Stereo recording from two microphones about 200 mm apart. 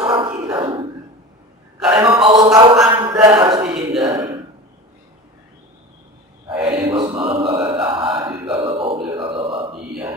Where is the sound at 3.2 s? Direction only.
20° right (ahead or behind).